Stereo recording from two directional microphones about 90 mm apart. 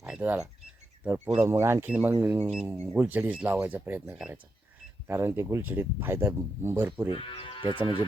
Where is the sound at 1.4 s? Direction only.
30° right (ahead or behind).